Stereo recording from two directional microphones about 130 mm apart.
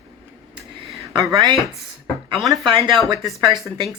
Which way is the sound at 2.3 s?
Centre (ahead or behind).